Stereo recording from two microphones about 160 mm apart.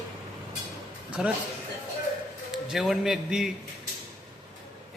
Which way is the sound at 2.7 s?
Centre (ahead or behind).